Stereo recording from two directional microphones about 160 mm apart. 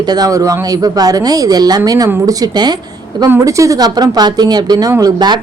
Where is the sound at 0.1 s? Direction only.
20° right (ahead or behind).